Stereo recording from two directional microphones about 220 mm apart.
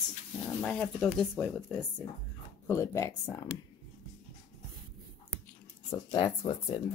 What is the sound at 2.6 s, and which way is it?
Speech, 15° left (ahead or behind).